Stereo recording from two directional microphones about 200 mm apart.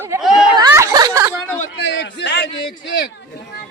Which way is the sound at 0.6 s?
15° right (ahead or behind).